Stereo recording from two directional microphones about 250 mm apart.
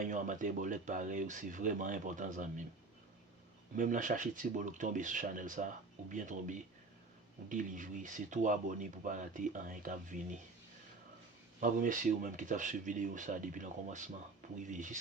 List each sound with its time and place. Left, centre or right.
0.0 s speech: right
3.8 s speech: right
11.6 s speech: right